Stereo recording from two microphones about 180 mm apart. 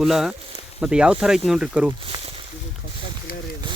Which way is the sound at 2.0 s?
30° right (ahead or behind).